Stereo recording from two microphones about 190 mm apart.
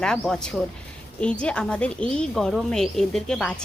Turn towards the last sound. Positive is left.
turn(degrees=5)  # may be behind; listen again after turning